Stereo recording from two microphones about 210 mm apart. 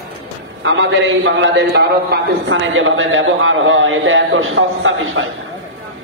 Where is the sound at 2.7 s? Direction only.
70° right (ahead or behind).